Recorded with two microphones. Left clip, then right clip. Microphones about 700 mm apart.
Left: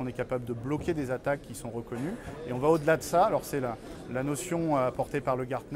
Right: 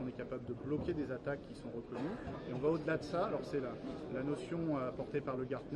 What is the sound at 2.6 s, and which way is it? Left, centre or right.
Speech, left.